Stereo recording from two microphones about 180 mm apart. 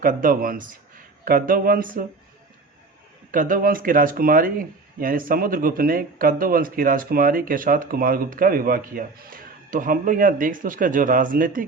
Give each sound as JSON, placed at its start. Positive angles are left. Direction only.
{"t": 0.0, "sound": "speech", "side_deg": -50}
{"t": 3.3, "sound": "speech", "side_deg": -50}